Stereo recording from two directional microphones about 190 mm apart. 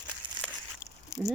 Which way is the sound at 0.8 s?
20° left (ahead or behind).